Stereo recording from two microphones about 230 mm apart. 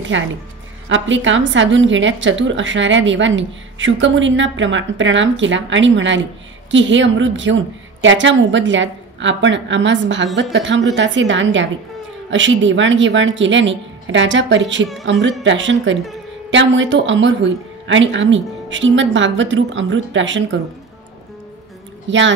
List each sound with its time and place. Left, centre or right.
0.1 s a woman's voice: right